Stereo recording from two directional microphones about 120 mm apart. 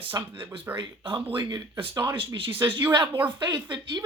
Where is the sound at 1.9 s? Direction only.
30° right (ahead or behind).